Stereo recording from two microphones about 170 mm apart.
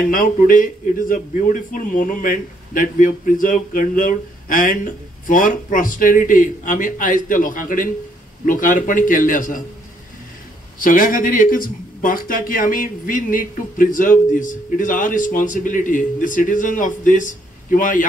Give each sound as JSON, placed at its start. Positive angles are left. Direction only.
{"t": 0.0, "sound": "speech", "side_deg": 55}
{"t": 10.8, "sound": "speech", "side_deg": 55}